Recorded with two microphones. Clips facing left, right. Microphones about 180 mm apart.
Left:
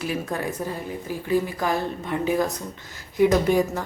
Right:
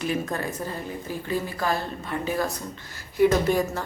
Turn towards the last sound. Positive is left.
turn(degrees=15)  # may be behind; listen again after turning